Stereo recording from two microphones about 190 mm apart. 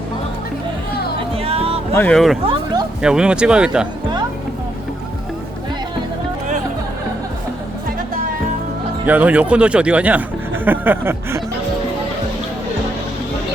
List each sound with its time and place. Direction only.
1.4 s music: 30° right (ahead or behind)
1.9 s speech: 10° left (ahead or behind)
9.0 s speech: 10° right (ahead or behind)